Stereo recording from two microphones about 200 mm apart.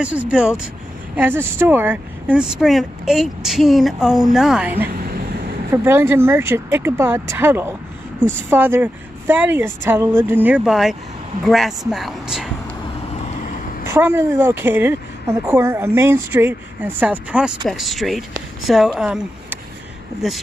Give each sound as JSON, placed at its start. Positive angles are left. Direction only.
{"t": 0.0, "sound": "speech", "side_deg": -5}
{"t": 4.7, "sound": "vehicle", "side_deg": -50}
{"t": 5.7, "sound": "a woman's voice", "side_deg": -15}
{"t": 13.8, "sound": "a woman's voice", "side_deg": -10}